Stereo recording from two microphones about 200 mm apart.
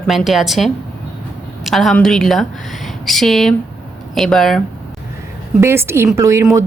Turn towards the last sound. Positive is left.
turn(degrees=-15)  # may be behind; listen again after turning